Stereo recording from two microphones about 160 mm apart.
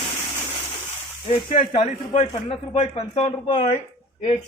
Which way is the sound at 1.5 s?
35° left (ahead or behind).